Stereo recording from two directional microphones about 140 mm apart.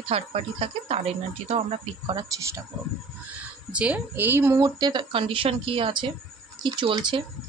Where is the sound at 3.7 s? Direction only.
10° right (ahead or behind).